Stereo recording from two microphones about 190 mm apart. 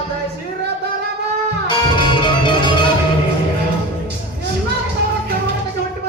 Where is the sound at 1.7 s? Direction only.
25° left (ahead or behind).